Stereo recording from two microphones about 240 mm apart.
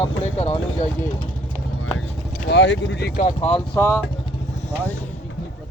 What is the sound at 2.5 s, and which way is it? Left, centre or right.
Speech, left.